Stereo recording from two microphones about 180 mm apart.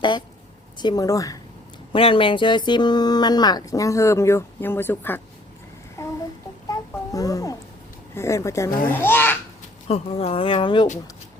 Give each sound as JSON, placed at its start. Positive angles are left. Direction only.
{"t": 0.8, "sound": "speech", "side_deg": 20}
{"t": 1.9, "sound": "speech", "side_deg": 30}
{"t": 6.0, "sound": "a sound", "side_deg": 15}
{"t": 8.1, "sound": "a child's voice", "side_deg": 15}
{"t": 9.8, "sound": "speech", "side_deg": 35}